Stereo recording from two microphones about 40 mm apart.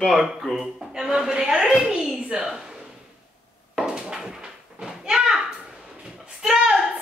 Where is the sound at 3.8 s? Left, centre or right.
Centre.